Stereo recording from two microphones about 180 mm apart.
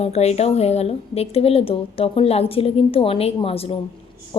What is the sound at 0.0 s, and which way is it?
Speech, 35° left (ahead or behind).